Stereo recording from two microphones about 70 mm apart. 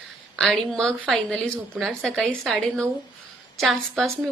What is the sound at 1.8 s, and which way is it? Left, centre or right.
A woman's voice, centre.